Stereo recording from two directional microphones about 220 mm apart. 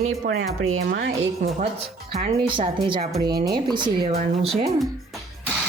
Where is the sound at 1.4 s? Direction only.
35° right (ahead or behind).